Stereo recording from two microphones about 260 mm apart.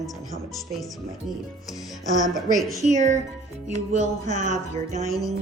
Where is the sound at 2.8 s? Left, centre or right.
Right.